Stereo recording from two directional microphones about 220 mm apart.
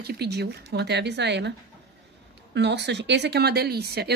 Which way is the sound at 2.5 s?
50° right (ahead or behind).